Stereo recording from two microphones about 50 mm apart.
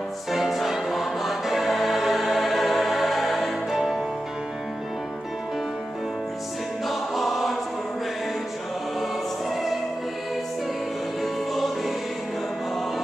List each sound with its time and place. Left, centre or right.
0.3 s choir: centre
6.9 s choir: centre
11.5 s choir: centre